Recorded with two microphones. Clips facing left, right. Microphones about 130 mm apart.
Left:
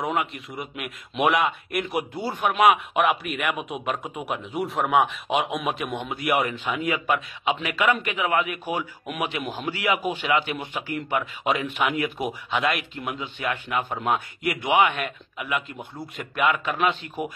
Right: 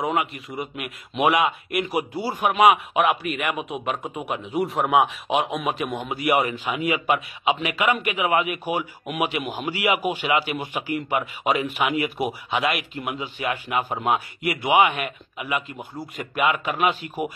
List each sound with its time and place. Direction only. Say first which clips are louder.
0.0 s a man's voice: right 2 dB; centre (ahead or behind)